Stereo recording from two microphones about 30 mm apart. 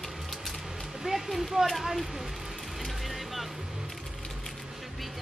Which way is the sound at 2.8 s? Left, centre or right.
Centre.